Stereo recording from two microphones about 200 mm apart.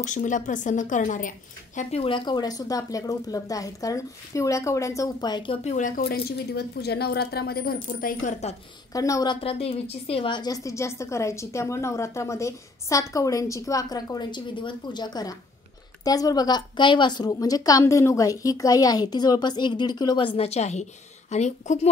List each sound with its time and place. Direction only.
0.0 s a woman's voice: 40° left (ahead or behind)
8.9 s a woman's voice: 15° left (ahead or behind); by 21.7 s 35° left (ahead or behind)